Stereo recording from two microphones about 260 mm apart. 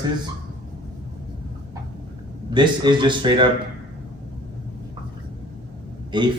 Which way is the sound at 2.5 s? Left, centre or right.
Centre.